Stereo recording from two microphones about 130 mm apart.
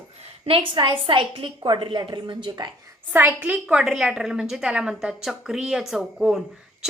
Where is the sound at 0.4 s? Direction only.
40° right (ahead or behind).